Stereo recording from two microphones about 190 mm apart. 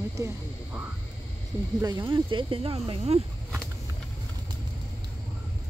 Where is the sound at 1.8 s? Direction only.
25° right (ahead or behind).